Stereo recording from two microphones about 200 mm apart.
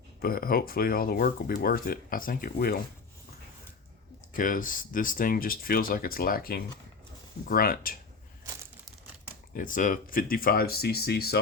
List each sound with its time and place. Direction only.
0.2 s speech: 45° left (ahead or behind)
4.4 s speech: 45° left (ahead or behind)
9.6 s speech: 40° left (ahead or behind)